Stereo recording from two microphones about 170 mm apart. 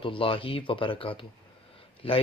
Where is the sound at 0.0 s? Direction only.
30° left (ahead or behind).